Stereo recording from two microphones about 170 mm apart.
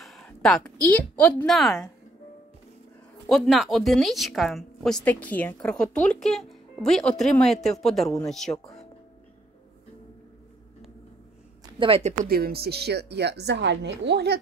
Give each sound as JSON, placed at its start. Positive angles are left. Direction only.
{"t": 0.0, "sound": "a woman's voice", "side_deg": 0}
{"t": 3.3, "sound": "speech", "side_deg": 0}
{"t": 11.8, "sound": "speech", "side_deg": -40}
{"t": 12.3, "sound": "a woman's voice", "side_deg": -60}